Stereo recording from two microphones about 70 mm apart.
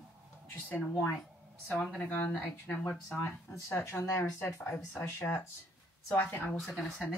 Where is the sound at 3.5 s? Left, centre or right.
Left.